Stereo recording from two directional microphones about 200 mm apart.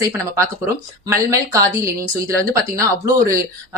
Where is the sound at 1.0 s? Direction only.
15° right (ahead or behind).